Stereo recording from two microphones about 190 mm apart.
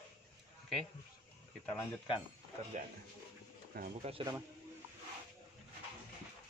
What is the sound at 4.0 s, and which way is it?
Speech, 30° right (ahead or behind).